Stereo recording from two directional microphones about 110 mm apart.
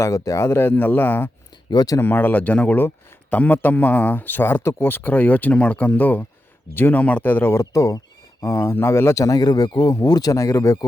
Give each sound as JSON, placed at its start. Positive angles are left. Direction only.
{"t": 0.0, "sound": "speech", "side_deg": 30}
{"t": 1.7, "sound": "speech", "side_deg": 35}
{"t": 2.0, "sound": "a man's voice", "side_deg": 20}